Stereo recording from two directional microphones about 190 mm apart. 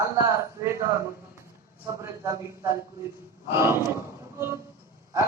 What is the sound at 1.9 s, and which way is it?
Speech, 15° right (ahead or behind).